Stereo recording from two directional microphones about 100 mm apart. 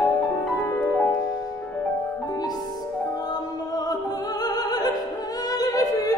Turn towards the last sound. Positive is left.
turn(degrees=40)  # may be behind; listen again after turning